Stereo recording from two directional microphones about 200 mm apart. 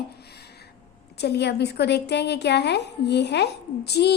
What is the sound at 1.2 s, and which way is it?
A woman's voice, 55° left (ahead or behind).